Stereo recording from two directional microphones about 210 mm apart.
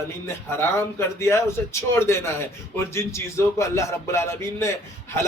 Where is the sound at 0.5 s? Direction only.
10° left (ahead or behind).